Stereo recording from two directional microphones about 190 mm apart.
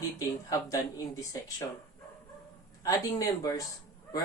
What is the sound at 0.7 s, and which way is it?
Speech, 20° left (ahead or behind).